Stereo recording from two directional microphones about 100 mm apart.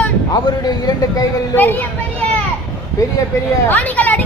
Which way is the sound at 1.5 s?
20° left (ahead or behind).